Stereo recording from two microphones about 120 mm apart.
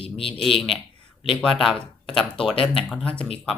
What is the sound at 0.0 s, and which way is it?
Speech, 50° left (ahead or behind).